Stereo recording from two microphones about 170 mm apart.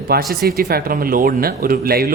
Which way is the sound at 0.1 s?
65° right (ahead or behind).